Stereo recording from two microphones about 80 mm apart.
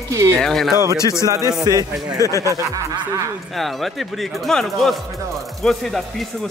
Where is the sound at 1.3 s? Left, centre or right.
Right.